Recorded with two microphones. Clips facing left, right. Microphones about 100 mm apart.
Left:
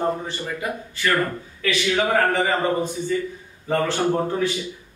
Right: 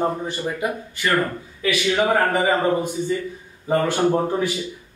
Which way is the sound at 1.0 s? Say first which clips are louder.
Right 1 dB; 20° right (ahead or behind).